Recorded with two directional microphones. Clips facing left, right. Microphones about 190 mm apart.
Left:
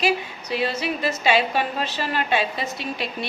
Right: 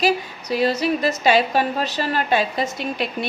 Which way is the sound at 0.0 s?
40° right (ahead or behind).